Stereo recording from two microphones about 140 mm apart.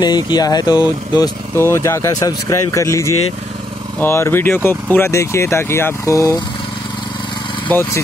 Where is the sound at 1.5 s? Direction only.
20° left (ahead or behind).